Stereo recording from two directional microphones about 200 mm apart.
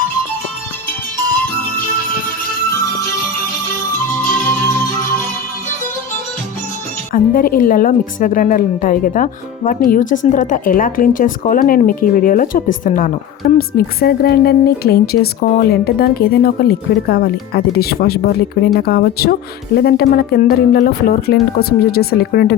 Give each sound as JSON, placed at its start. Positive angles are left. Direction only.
{"t": 7.1, "sound": "a woman's voice", "side_deg": 45}